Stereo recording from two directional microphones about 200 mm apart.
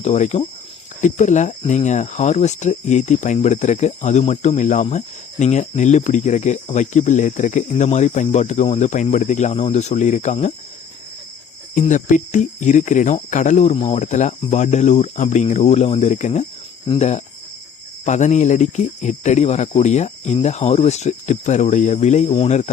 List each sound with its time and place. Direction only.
0.0 s speech: 35° left (ahead or behind)
11.7 s speech: 40° left (ahead or behind)